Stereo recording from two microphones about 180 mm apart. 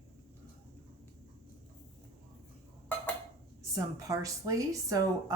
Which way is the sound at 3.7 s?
20° right (ahead or behind).